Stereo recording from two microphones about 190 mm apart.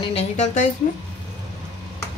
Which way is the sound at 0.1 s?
40° left (ahead or behind).